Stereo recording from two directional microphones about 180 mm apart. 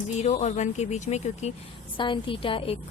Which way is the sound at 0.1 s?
40° left (ahead or behind).